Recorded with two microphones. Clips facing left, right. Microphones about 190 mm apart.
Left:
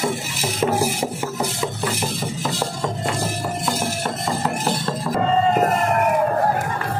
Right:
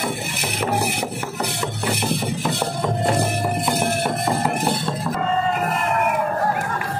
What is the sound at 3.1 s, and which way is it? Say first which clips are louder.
Music: right 4 dB; 60° right (ahead or behind).